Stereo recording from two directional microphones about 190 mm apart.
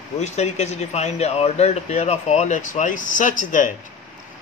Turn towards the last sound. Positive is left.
turn(degrees=45)  # may be behind; listen again after turning